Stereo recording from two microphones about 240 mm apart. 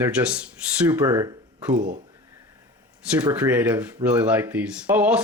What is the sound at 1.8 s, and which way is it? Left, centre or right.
Speech, right.